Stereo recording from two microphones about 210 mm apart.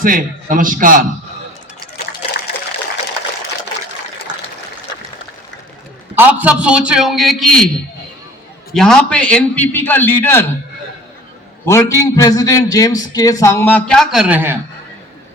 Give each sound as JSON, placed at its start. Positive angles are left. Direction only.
{"t": 0.0, "sound": "a man's voice", "side_deg": -40}
{"t": 4.3, "sound": "water", "side_deg": -20}
{"t": 6.1, "sound": "a man's voice", "side_deg": -5}
{"t": 8.7, "sound": "a man's voice", "side_deg": 0}
{"t": 11.6, "sound": "a man's voice", "side_deg": 15}